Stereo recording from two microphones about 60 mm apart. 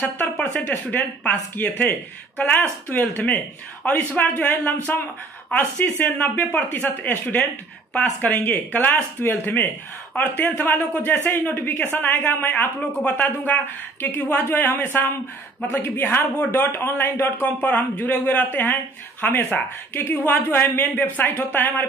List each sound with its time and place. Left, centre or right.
1.2 s speech: left
3.8 s speech: left
6.3 s speech: left